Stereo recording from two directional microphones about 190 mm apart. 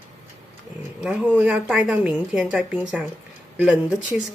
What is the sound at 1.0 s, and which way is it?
A woman's voice, 5° right (ahead or behind).